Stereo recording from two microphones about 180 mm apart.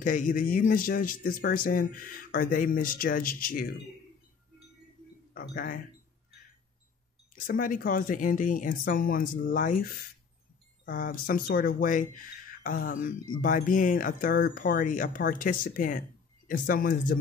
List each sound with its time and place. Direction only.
0.0 s speech: 45° left (ahead or behind)
5.3 s speech: 50° left (ahead or behind)
7.3 s speech: 50° left (ahead or behind)